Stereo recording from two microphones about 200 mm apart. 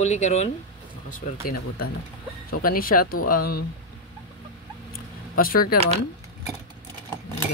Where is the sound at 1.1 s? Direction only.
50° left (ahead or behind).